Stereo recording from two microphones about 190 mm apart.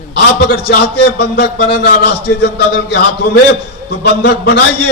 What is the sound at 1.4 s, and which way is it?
A man's voice, 60° left (ahead or behind).